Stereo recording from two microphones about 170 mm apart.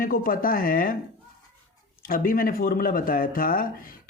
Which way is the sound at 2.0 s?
55° left (ahead or behind).